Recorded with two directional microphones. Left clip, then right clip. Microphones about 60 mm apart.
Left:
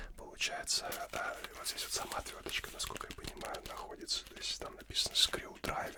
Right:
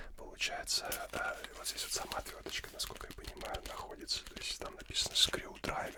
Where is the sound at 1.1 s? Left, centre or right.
Right.